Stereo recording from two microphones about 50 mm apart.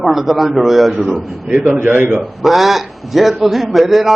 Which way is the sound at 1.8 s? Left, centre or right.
Right.